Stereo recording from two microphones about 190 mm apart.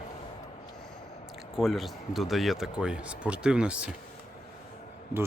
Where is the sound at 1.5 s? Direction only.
Centre (ahead or behind).